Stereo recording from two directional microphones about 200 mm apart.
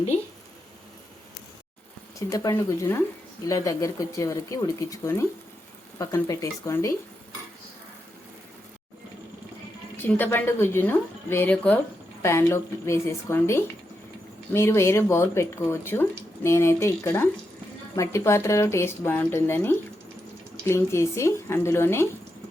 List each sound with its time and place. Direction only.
2.1 s speech: 15° left (ahead or behind)
10.0 s speech: 10° left (ahead or behind)